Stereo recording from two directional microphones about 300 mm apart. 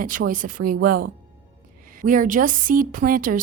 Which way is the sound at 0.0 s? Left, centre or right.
Right.